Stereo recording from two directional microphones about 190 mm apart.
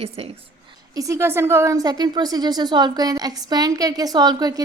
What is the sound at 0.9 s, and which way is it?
A woman's voice, 15° right (ahead or behind).